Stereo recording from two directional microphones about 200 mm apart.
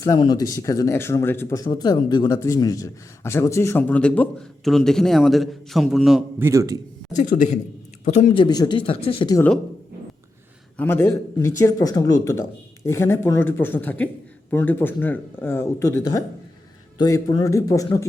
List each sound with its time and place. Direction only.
0.0 s speech: 20° left (ahead or behind); by 6.5 s centre (ahead or behind)
6.5 s a man's voice: 15° right (ahead or behind)
7.2 s speech: 40° left (ahead or behind)
8.4 s speech: 20° left (ahead or behind)
10.8 s speech: 10° left (ahead or behind)